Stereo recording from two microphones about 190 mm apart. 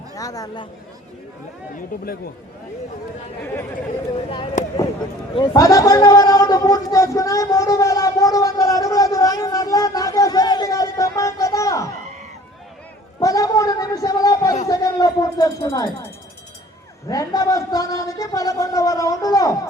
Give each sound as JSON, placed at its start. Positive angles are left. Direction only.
{"t": 0.2, "sound": "speech", "side_deg": 20}
{"t": 1.7, "sound": "speech", "side_deg": 50}
{"t": 5.3, "sound": "a sound", "side_deg": 20}
{"t": 13.1, "sound": "a sound", "side_deg": 20}
{"t": 14.7, "sound": "speech", "side_deg": 20}
{"t": 17.1, "sound": "speech", "side_deg": 20}